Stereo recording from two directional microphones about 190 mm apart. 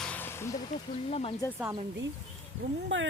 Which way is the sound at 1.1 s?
30° left (ahead or behind).